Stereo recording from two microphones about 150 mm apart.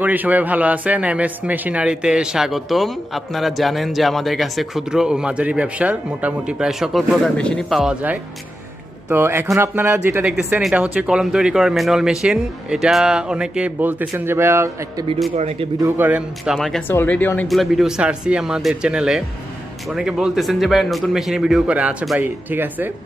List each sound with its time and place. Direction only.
0.0 s a man's voice: 10° right (ahead or behind)
10.2 s a man's voice: 5° right (ahead or behind)
15.3 s a man's voice: 45° right (ahead or behind)
15.8 s a man's voice: 10° right (ahead or behind)
16.8 s speech: 15° left (ahead or behind)
17.5 s a man's voice: centre (ahead or behind)